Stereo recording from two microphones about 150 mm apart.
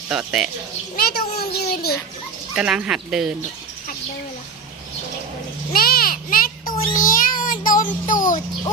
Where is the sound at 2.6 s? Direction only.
5° right (ahead or behind).